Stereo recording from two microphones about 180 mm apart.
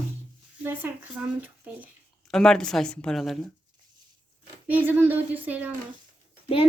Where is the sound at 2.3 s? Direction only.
5° left (ahead or behind).